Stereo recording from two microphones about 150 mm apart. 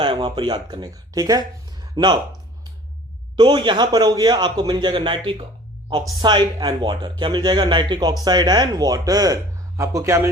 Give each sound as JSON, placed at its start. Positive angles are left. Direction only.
{"t": 0.0, "sound": "speech", "side_deg": -30}
{"t": 3.3, "sound": "a man's voice", "side_deg": -30}